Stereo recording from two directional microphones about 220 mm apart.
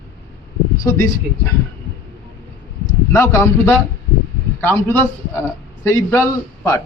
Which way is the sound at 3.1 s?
10° left (ahead or behind).